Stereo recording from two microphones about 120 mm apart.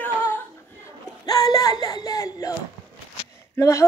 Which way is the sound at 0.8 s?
30° left (ahead or behind).